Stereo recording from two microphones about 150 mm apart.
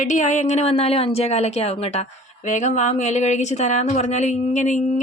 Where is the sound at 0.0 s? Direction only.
55° left (ahead or behind).